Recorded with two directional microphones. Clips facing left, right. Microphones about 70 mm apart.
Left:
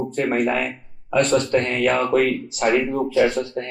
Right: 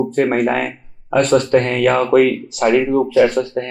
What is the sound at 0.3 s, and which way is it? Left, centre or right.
Speech, right.